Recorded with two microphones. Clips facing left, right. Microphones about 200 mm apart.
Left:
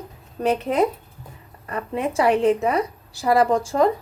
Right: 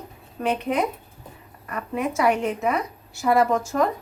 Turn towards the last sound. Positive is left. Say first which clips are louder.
# left 3 dB
turn(degrees=30)  # may be behind; listen again after turning